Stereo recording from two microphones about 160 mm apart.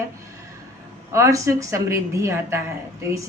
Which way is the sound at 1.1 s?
20° right (ahead or behind).